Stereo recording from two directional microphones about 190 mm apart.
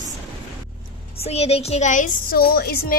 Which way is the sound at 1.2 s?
35° left (ahead or behind).